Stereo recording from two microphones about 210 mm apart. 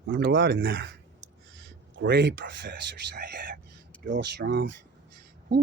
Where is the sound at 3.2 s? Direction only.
45° right (ahead or behind).